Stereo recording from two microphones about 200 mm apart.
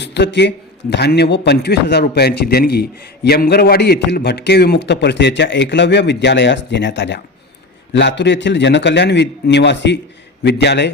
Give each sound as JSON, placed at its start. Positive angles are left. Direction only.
{"t": 0.0, "sound": "a man's voice", "side_deg": 60}